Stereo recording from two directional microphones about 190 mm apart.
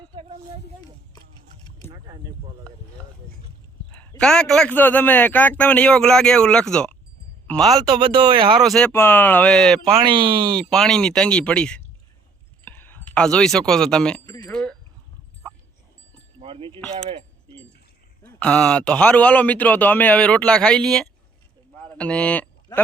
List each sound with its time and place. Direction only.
3.9 s a man's voice: 10° left (ahead or behind)
7.9 s speech: 25° right (ahead or behind)
8.6 s a man's voice: centre (ahead or behind)
10.1 s speech: 25° right (ahead or behind)
10.7 s a man's voice: centre (ahead or behind)
14.4 s chink: 5° left (ahead or behind)
16.4 s a sound: 30° right (ahead or behind)
18.2 s a man's voice: 5° left (ahead or behind)
21.8 s a sound: 5° left (ahead or behind)